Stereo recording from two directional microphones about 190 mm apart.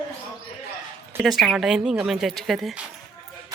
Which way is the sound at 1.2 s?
Centre (ahead or behind).